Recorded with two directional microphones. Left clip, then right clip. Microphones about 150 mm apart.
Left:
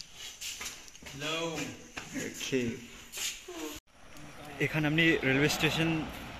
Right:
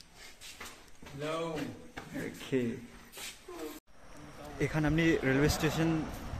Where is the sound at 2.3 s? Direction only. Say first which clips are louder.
Left 1 dB; 5° right (ahead or behind).